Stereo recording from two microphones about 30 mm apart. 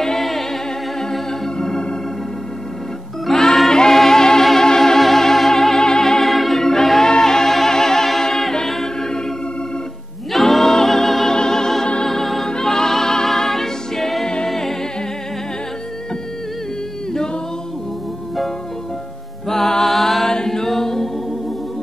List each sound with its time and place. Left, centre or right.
0.0 s music: centre
1.1 s organ: centre
3.3 s music: centre
6.2 s music: centre
6.6 s choir: centre
7.1 s music: left
8.2 s a capella: centre
10.3 s music: centre
10.6 s music: centre
12.4 s music: left
14.5 s humming: centre
19.4 s music: centre
20.2 s a capella: centre